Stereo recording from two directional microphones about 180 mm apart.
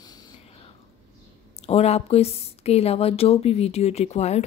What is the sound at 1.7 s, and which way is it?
Speech, 35° left (ahead or behind).